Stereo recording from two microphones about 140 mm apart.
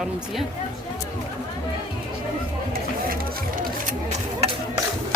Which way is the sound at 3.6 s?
65° right (ahead or behind).